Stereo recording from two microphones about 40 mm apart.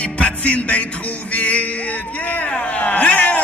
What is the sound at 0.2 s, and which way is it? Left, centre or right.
Music, left.